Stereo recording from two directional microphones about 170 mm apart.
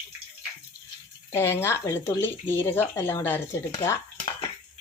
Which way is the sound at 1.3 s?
15° left (ahead or behind).